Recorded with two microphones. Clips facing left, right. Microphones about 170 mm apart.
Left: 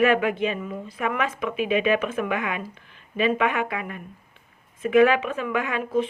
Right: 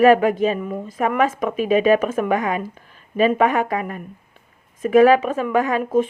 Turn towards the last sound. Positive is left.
turn(degrees=-45)  # may be behind; listen again after turning